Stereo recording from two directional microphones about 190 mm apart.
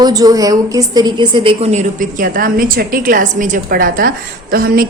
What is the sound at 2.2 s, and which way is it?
A woman's voice, 50° right (ahead or behind).